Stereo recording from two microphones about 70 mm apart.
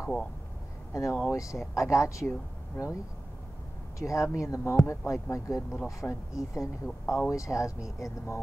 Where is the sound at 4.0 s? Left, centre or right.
Left.